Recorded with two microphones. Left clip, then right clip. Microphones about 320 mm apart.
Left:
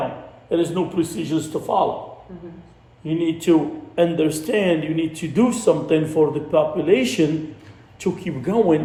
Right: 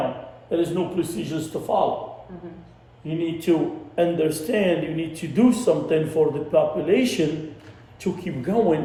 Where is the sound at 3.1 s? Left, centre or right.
Left.